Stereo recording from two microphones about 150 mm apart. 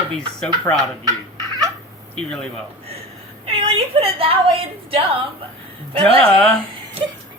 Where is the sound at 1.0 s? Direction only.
25° right (ahead or behind).